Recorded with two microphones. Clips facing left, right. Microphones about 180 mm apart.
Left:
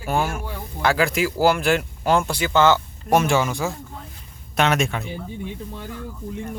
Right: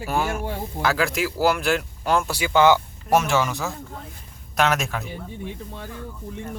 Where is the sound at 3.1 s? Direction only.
Centre (ahead or behind).